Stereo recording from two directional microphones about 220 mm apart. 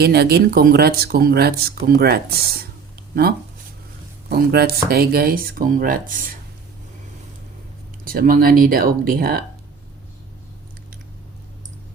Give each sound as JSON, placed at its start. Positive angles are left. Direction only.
{"t": 0.0, "sound": "speech", "side_deg": -45}
{"t": 4.4, "sound": "speech", "side_deg": -45}
{"t": 8.0, "sound": "speech", "side_deg": -40}